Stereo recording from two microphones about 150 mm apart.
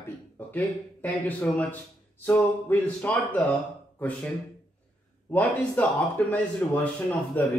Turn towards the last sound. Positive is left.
turn(degrees=10)  # may be behind; listen again after turning